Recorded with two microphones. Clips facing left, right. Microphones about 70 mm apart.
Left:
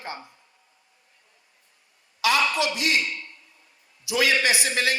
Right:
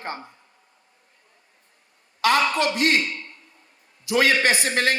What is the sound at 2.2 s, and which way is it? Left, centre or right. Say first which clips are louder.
A man's voice: right 3 dB; right.